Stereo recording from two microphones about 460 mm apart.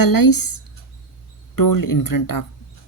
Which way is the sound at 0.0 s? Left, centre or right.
Left.